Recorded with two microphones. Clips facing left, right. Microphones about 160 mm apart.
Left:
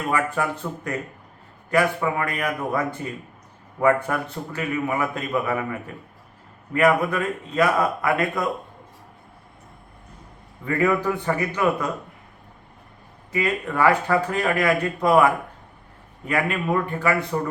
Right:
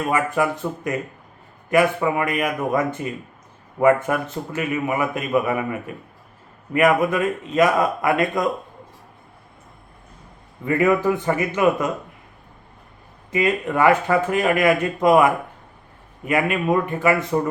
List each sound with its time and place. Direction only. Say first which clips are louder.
0.1 s a man's voice: right 2 dB; 15° right (ahead or behind)
10.7 s speech: right 3 dB; 20° right (ahead or behind)
13.3 s a man's voice: right 4 dB; 20° right (ahead or behind)